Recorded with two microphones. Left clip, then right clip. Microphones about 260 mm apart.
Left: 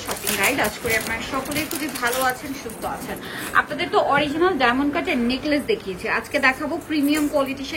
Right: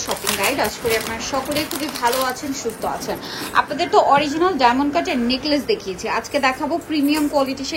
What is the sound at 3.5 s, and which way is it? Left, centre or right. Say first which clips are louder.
A woman's voice: right 3 dB; centre.